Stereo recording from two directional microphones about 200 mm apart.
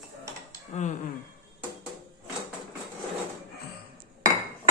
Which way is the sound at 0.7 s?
35° left (ahead or behind).